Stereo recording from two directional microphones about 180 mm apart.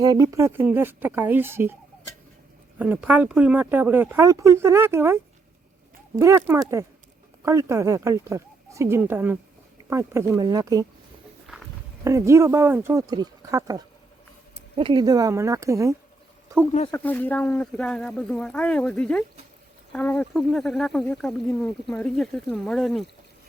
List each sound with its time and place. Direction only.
0.0 s speech: 20° right (ahead or behind)
2.7 s speech: 10° right (ahead or behind)
11.5 s walk: 5° right (ahead or behind)
12.0 s speech: 15° right (ahead or behind)
16.9 s speech: 10° left (ahead or behind)